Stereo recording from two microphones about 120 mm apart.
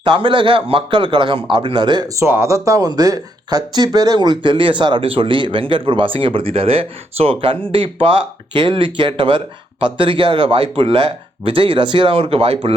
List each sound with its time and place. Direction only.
0.0 s speech: 40° right (ahead or behind)
2.1 s speech: 20° right (ahead or behind); by 12.7 s 50° right (ahead or behind)